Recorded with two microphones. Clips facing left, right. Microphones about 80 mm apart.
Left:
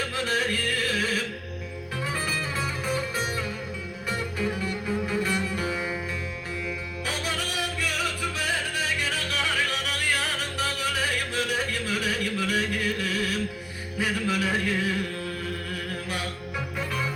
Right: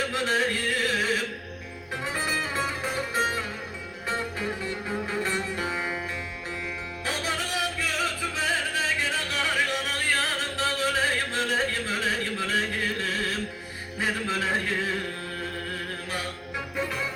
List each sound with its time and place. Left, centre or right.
0.1 s music: right
7.0 s music: right
14.0 s a sound: right